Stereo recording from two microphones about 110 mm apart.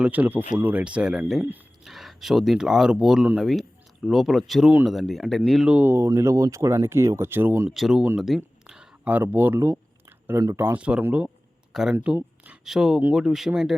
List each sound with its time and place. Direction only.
0.0 s speech: 15° right (ahead or behind)
1.8 s speech: centre (ahead or behind)
5.7 s speech: 20° right (ahead or behind)
7.7 s speech: 5° right (ahead or behind)
8.6 s a sound: 5° right (ahead or behind)
10.6 s speech: 15° right (ahead or behind)
11.9 s a sound: 15° right (ahead or behind)
12.6 s speech: 5° right (ahead or behind)